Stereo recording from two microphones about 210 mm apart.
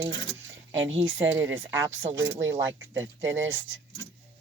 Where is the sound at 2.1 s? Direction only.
65° right (ahead or behind).